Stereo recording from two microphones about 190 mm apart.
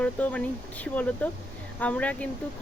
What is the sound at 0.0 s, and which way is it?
Speech, 5° left (ahead or behind).